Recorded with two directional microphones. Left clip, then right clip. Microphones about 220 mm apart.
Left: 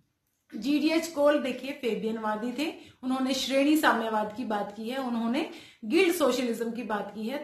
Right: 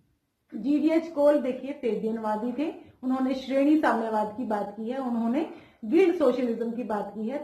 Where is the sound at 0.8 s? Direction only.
25° left (ahead or behind).